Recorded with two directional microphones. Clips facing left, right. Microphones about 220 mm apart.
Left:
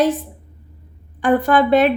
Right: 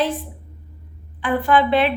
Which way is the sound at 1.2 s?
45° left (ahead or behind).